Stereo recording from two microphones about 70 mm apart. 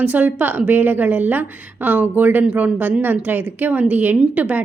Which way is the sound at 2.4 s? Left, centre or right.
Centre.